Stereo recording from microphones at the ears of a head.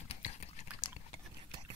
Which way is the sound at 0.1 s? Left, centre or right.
Left.